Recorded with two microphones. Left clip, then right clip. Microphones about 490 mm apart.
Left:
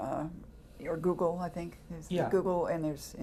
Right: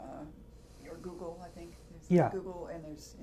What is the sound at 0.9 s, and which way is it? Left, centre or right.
Speech, left.